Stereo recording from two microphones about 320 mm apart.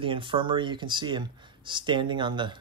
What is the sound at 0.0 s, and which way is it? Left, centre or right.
Speech, centre.